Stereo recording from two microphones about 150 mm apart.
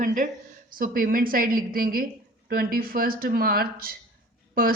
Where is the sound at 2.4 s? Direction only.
85° right.